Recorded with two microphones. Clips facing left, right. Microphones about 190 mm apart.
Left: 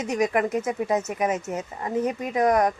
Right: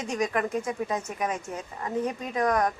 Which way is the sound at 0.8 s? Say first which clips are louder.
Left 6 dB; 20° left (ahead or behind).